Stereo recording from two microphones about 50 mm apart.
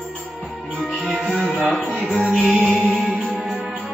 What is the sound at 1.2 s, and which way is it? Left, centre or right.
Music, centre.